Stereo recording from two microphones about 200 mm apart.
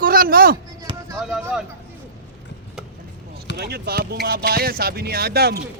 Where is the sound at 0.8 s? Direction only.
15° right (ahead or behind).